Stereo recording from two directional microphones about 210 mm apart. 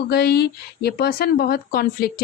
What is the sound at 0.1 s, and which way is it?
Speech, 50° left (ahead or behind).